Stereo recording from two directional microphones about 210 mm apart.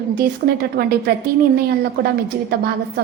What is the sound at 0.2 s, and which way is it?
Speech, 50° right (ahead or behind).